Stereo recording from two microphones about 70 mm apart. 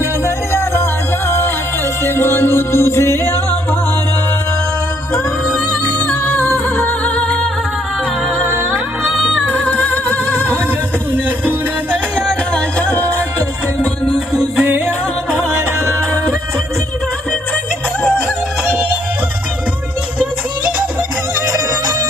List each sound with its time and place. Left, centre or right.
0.3 s music: left
2.0 s music: left
5.1 s music: centre
6.5 s music: left
8.4 s music: right
9.0 s music: centre
9.6 s music: left
11.1 s music: right
12.5 s music: left
14.8 s music: centre
21.4 s music: right